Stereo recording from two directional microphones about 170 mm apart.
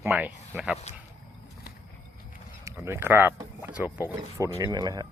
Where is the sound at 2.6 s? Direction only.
15° right (ahead or behind).